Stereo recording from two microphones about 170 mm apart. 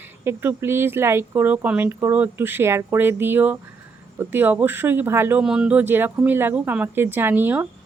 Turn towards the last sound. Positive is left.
turn(degrees=-10)  # may be behind; listen again after turning